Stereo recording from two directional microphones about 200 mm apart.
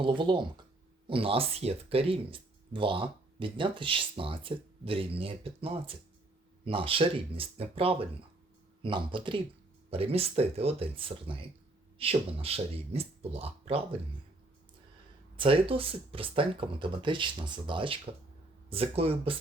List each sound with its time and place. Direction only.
0.0 s speech: 25° right (ahead or behind)
15.4 s speech: 25° right (ahead or behind)